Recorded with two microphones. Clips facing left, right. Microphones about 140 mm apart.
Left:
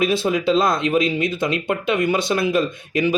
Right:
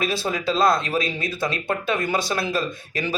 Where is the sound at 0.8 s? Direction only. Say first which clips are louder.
Left 6 dB; 20° left (ahead or behind).